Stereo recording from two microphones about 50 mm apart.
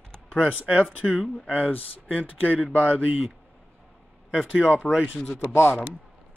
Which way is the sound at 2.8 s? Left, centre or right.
Right.